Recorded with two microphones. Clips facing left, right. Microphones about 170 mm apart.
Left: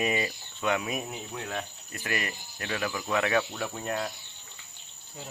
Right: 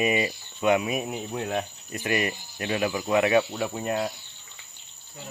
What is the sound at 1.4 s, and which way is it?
Speech, 20° right (ahead or behind).